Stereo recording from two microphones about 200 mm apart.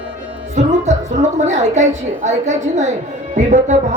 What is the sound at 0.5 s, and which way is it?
A woman's voice, 35° right (ahead or behind).